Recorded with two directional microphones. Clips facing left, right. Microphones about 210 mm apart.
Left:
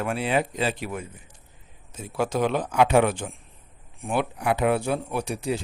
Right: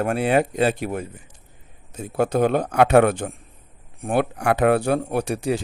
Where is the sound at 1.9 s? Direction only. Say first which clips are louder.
Right 5 dB; 60° right (ahead or behind).